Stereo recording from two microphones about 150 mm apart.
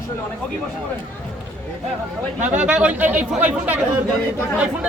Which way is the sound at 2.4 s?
10° right (ahead or behind).